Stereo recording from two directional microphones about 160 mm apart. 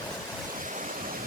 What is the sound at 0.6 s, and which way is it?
Waterfall, 55° right (ahead or behind).